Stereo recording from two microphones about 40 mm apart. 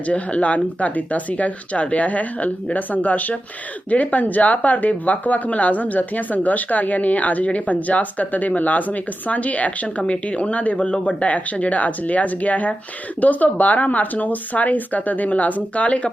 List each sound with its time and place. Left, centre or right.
0.1 s speech: left
11.2 s speech: left